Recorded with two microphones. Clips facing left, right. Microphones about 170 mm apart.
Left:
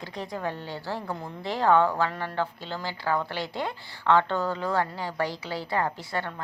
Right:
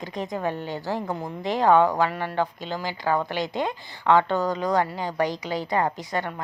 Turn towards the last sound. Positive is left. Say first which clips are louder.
# right 3 dB
turn(degrees=-15)  # may be behind; listen again after turning